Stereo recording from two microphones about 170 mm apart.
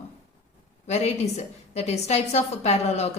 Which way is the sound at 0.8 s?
40° left (ahead or behind).